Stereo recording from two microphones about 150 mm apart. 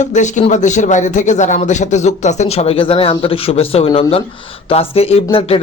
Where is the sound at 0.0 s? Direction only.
55° left (ahead or behind).